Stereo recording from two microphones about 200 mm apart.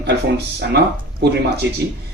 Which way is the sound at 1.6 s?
60° right (ahead or behind).